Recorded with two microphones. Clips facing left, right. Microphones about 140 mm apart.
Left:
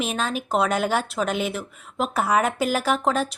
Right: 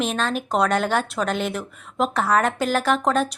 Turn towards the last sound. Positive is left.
turn(degrees=0)  # may be behind; listen again after turning